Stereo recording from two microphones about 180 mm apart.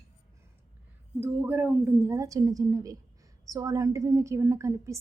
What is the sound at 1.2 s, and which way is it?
A woman's voice, 10° right (ahead or behind).